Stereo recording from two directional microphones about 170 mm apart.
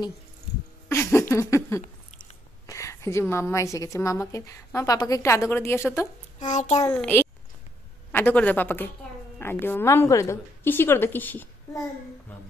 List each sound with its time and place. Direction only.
0.8 s a sound: 15° left (ahead or behind)
1.3 s a woman's voice: 15° left (ahead or behind)
6.4 s a child's voice: 45° left (ahead or behind)
6.9 s a woman's voice: 10° left (ahead or behind)